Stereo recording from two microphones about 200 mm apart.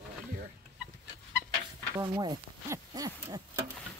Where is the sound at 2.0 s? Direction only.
20° right (ahead or behind).